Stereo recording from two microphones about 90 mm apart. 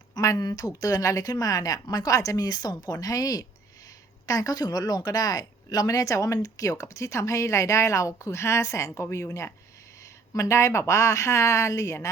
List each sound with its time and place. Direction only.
0.1 s a woman's voice: 40° left (ahead or behind)